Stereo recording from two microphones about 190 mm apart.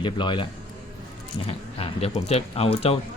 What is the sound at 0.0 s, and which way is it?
Speech, 25° left (ahead or behind).